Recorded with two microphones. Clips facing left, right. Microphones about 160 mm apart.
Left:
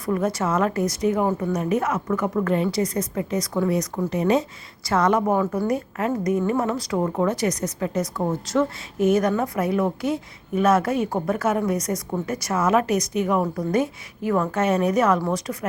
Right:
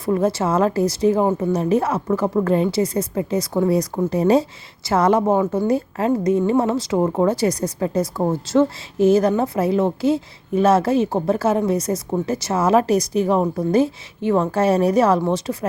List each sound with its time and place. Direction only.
0.0 s a woman's voice: 30° right (ahead or behind)